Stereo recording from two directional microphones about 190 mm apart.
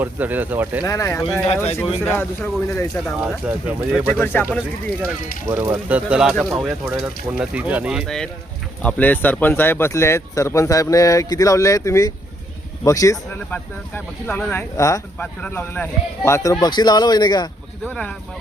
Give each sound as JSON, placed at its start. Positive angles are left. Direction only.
{"t": 0.0, "sound": "speech", "side_deg": -10}
{"t": 0.9, "sound": "speech", "side_deg": 15}
{"t": 3.2, "sound": "speech", "side_deg": -5}
{"t": 4.1, "sound": "speech", "side_deg": 10}
{"t": 5.5, "sound": "speech", "side_deg": -10}
{"t": 17.9, "sound": "speech", "side_deg": 5}